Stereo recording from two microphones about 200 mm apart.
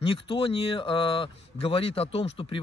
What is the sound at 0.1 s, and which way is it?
A man's voice, 25° left (ahead or behind).